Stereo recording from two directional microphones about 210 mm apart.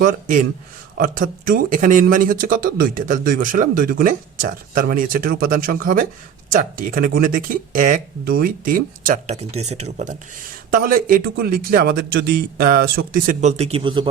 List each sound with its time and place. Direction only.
0.0 s a man's voice: 40° right (ahead or behind); by 14.1 s 25° right (ahead or behind)